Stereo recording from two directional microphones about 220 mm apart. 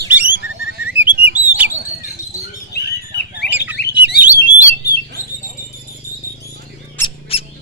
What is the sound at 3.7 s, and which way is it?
Bird, 45° left (ahead or behind).